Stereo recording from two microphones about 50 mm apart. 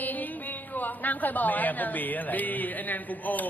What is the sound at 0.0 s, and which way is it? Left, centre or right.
Speech, left.